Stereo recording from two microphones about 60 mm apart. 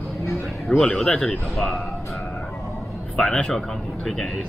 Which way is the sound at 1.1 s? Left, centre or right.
Left.